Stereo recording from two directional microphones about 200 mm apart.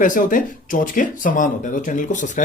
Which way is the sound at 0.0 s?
40° left (ahead or behind).